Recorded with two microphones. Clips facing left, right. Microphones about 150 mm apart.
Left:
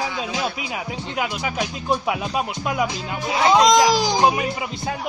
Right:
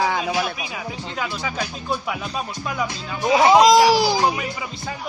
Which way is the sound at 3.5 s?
5° right (ahead or behind).